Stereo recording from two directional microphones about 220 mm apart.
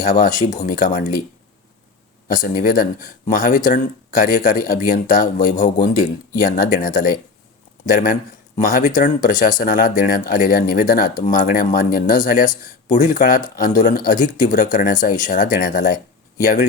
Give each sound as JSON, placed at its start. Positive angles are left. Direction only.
{"t": 0.0, "sound": "speech", "side_deg": 35}
{"t": 2.2, "sound": "speech", "side_deg": 35}